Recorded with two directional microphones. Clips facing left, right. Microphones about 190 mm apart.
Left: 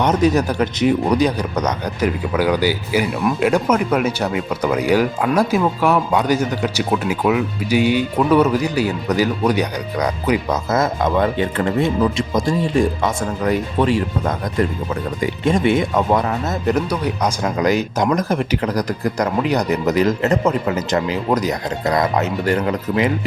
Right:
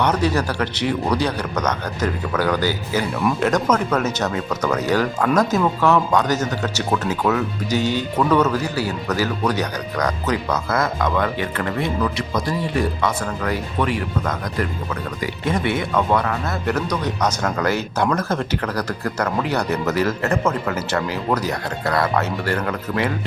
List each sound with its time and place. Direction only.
0.0 s speech: 20° left (ahead or behind)